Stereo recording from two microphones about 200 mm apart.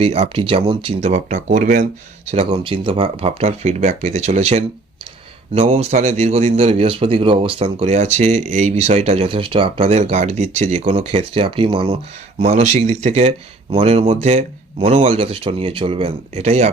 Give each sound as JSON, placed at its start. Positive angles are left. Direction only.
{"t": 0.0, "sound": "a man's voice", "side_deg": -30}